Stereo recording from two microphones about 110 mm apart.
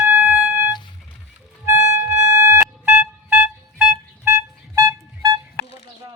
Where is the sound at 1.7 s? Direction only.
20° right (ahead or behind).